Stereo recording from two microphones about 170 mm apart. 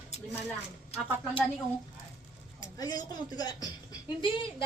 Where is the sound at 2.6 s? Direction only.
20° left (ahead or behind).